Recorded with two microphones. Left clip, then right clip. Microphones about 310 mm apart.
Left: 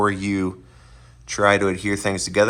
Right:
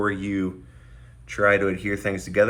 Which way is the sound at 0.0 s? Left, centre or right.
Centre.